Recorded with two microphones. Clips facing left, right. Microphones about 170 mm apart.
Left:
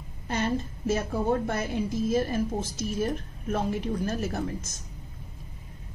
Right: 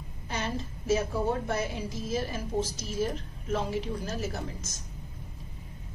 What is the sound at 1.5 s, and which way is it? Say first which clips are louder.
A woman's voice: left 3 dB; 50° left (ahead or behind).